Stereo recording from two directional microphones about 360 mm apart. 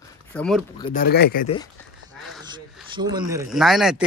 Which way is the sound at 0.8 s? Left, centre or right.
Left.